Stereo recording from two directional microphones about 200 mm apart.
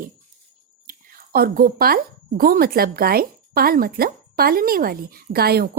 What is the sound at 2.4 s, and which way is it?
A woman's voice, 50° right (ahead or behind).